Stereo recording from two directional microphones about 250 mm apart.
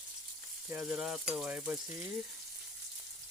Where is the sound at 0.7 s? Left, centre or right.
Centre.